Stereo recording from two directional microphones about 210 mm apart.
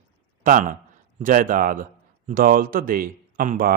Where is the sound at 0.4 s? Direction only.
40° right (ahead or behind).